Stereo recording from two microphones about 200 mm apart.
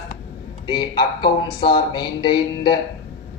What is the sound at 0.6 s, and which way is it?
A man's voice, 25° left (ahead or behind).